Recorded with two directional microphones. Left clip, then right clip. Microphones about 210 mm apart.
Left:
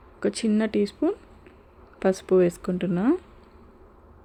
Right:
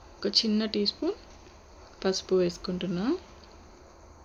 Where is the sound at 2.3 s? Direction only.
45° left (ahead or behind).